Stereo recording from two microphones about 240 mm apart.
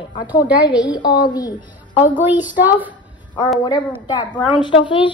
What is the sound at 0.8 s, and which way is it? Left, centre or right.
Speech, centre.